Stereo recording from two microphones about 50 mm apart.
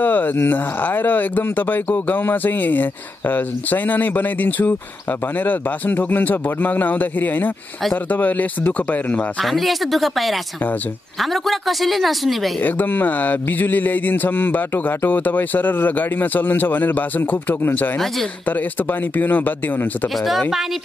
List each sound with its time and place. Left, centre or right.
0.0 s speech: left
9.4 s speech: centre
12.5 s speech: left
20.2 s speech: centre